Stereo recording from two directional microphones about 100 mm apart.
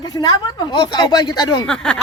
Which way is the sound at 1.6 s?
10° left (ahead or behind).